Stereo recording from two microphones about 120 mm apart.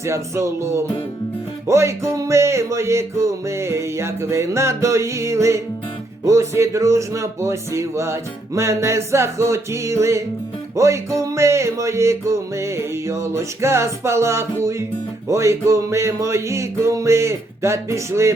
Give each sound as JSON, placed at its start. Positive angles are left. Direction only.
{"t": 0.0, "sound": "music", "side_deg": -25}